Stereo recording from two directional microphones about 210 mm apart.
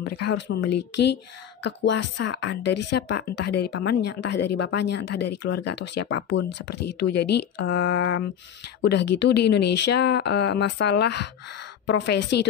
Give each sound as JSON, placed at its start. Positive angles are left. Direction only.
{"t": 0.0, "sound": "speech", "side_deg": 55}